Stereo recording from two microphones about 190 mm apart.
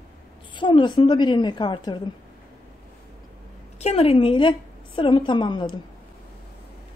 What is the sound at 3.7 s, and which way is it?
A woman's voice, 35° left (ahead or behind).